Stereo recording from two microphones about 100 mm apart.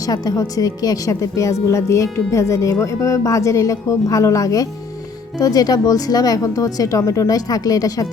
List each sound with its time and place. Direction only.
0.1 s a woman's voice: 40° left (ahead or behind)